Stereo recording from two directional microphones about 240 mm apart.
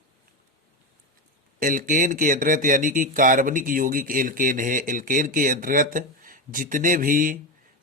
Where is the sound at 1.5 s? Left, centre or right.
Right.